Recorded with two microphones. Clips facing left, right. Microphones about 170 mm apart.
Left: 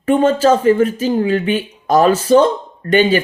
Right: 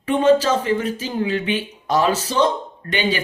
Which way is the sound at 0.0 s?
50° left (ahead or behind).